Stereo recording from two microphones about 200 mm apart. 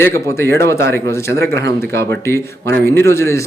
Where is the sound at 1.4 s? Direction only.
55° right (ahead or behind).